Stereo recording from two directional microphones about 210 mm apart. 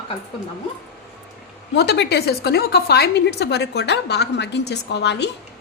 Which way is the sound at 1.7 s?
55° left (ahead or behind).